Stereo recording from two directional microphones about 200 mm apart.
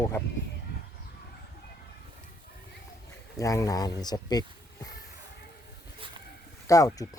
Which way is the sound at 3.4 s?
15° left (ahead or behind).